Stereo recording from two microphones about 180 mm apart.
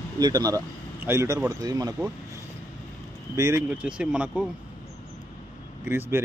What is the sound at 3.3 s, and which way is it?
Speech, 15° right (ahead or behind).